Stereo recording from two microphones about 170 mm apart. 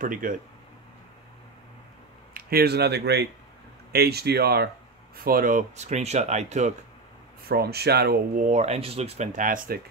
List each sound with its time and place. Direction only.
0.0 s speech: 50° right (ahead or behind)
2.3 s speech: 65° right (ahead or behind); by 6.7 s 45° right (ahead or behind)
7.4 s speech: 65° right (ahead or behind)
8.5 s speech: 40° right (ahead or behind)